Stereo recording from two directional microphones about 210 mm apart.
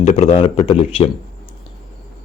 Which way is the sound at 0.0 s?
30° left (ahead or behind).